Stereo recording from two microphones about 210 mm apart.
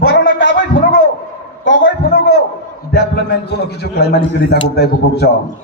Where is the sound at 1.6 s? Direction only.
60° left (ahead or behind).